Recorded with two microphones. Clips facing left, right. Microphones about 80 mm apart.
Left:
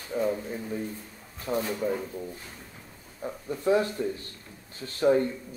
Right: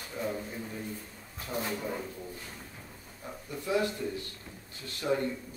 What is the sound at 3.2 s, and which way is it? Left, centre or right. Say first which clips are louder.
Speech: left 9 dB; left.